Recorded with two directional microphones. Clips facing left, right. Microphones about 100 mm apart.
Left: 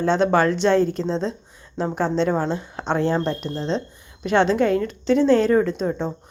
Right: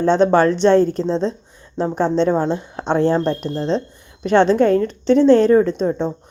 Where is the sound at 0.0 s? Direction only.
35° right (ahead or behind).